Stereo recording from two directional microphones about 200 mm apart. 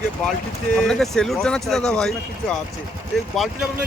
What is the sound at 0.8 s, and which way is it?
Speech, 5° left (ahead or behind).